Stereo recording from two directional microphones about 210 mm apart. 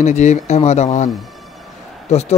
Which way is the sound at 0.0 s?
35° left (ahead or behind).